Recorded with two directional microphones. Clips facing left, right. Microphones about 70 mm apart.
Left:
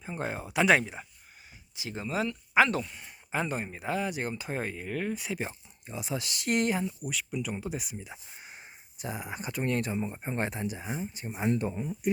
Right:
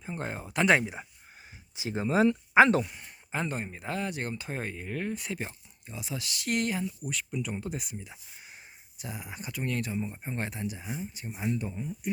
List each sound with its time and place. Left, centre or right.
0.0 s speech: centre
0.8 s speech: centre
1.7 s speech: right
3.0 s speech: centre
5.4 s speech: left
7.0 s speech: centre
8.0 s speech: left